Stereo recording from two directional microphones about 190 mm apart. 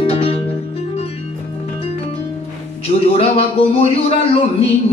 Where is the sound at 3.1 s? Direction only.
30° left (ahead or behind).